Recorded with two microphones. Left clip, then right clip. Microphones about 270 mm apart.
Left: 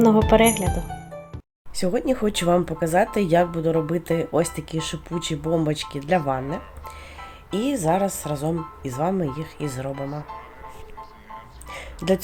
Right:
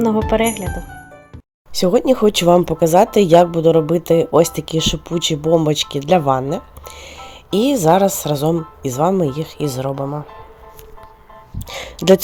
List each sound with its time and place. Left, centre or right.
0.0 s speech: centre
1.8 s speech: right
11.7 s speech: right